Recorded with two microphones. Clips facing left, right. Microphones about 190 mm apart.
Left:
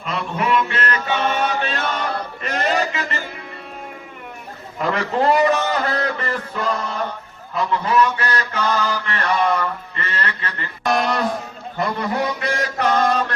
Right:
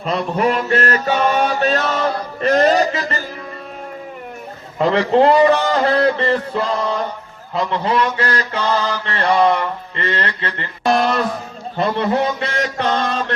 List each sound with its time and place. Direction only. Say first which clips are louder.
0.0 s mantra: right 6 dB; 35° right (ahead or behind)
4.8 s mantra: right 7 dB; 30° right (ahead or behind)